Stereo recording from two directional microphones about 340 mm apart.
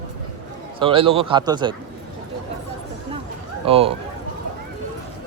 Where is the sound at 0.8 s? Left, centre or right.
Centre.